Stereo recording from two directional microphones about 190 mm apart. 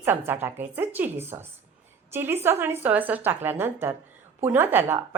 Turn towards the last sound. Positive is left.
turn(degrees=-10)  # may be behind; listen again after turning